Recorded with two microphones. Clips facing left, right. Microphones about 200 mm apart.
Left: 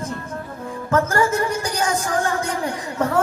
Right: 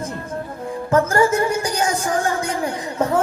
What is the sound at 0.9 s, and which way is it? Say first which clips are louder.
Speech: right 3 dB; 25° right (ahead or behind).